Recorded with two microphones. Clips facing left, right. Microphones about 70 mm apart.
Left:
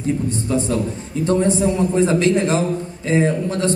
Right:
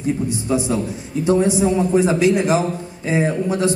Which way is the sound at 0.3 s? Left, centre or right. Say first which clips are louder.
Even; centre.